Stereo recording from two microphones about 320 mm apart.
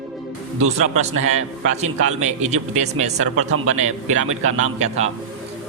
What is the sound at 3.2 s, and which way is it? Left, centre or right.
A man's voice, right.